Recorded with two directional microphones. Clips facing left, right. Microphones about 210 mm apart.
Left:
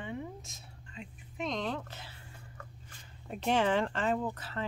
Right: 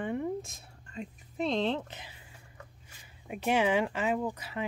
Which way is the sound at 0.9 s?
35° right (ahead or behind).